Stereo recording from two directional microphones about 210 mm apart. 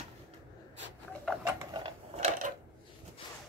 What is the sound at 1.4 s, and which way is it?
Sewing machine, 15° right (ahead or behind).